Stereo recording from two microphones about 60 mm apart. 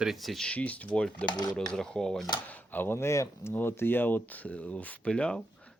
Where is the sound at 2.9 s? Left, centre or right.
Left.